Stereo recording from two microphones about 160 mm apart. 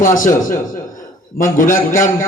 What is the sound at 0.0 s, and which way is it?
A man's voice, 55° left (ahead or behind).